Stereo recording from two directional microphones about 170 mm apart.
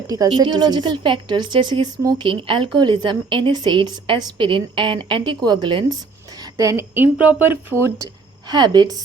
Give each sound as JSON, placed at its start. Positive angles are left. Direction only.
{"t": 0.1, "sound": "a woman's voice", "side_deg": -20}
{"t": 6.6, "sound": "speech", "side_deg": -15}